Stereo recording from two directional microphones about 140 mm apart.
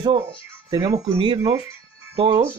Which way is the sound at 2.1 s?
40° right (ahead or behind).